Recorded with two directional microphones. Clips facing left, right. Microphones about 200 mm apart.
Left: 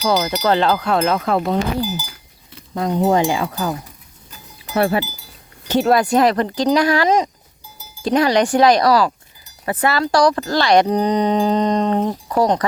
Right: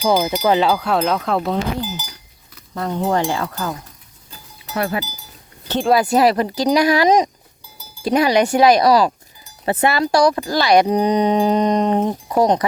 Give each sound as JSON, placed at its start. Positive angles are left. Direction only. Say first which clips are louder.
{"t": 0.1, "sound": "speech", "louder": "right 1 dB", "side_deg": -20}
{"t": 2.7, "sound": "speech", "louder": "left 3 dB", "side_deg": 15}
{"t": 4.7, "sound": "speech", "louder": "left 5 dB", "side_deg": 30}
{"t": 5.6, "sound": "speech", "louder": "left 4 dB", "side_deg": 10}
{"t": 5.9, "sound": "speech", "louder": "right 1 dB", "side_deg": -5}